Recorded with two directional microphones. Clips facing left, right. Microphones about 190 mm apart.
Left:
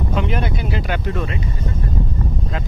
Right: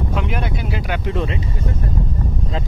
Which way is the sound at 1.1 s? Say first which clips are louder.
Right 2 dB; 20° right (ahead or behind).